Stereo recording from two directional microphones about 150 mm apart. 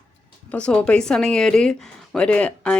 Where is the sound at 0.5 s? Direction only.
10° left (ahead or behind).